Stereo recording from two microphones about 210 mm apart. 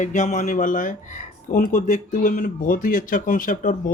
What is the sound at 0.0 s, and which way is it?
A man's voice, 35° left (ahead or behind).